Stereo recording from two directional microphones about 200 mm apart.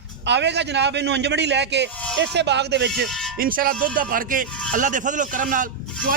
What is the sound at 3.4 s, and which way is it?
Speech, 45° right (ahead or behind).